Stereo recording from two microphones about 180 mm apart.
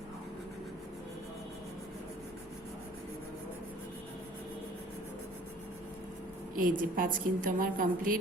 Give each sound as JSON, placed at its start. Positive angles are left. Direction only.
{"t": 6.6, "sound": "a woman's voice", "side_deg": -50}